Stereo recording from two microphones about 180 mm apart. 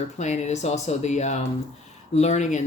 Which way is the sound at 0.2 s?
40° left (ahead or behind).